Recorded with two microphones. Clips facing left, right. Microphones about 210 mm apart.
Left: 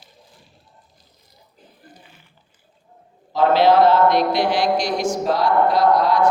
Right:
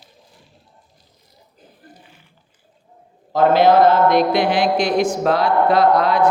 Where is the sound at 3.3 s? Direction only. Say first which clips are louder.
Right 2 dB; 50° right (ahead or behind).